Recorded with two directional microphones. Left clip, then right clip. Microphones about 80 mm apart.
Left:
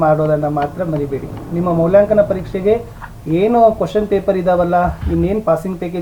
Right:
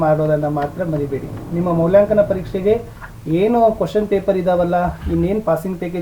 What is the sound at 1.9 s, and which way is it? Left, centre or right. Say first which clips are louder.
Speech: left 2 dB; centre.